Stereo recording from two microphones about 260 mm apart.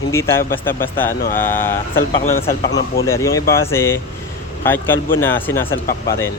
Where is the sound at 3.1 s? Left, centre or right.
Centre.